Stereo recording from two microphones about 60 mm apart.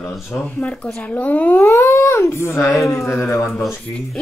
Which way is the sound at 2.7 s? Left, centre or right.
Left.